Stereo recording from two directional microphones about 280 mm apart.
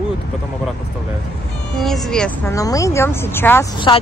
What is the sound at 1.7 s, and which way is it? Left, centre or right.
Speech, centre.